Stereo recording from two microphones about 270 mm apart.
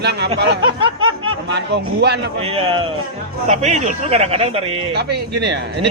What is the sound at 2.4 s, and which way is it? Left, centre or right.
Speech, right.